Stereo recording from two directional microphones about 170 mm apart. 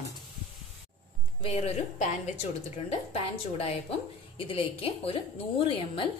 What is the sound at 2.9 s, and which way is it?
A woman's voice, 35° left (ahead or behind).